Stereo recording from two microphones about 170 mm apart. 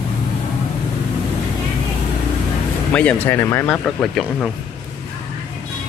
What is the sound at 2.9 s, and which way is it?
Speech, 10° left (ahead or behind).